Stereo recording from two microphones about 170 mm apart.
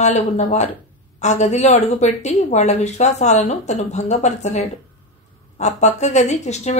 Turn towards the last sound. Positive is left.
turn(degrees=40)  # may be behind; listen again after turning